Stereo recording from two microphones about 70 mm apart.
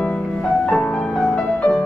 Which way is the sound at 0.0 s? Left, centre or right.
Centre.